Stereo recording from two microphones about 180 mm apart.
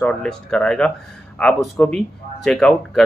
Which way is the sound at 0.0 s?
5° left (ahead or behind).